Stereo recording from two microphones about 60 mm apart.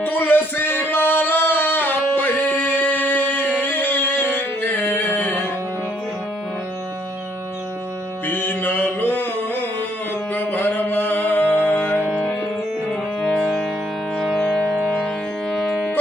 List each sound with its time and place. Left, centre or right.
0.0 s music: left
8.3 s music: left
14.3 s music: centre
14.6 s music: right
14.8 s music: centre